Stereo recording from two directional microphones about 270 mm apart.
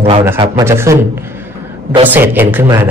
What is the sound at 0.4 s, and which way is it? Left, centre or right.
Speech, centre.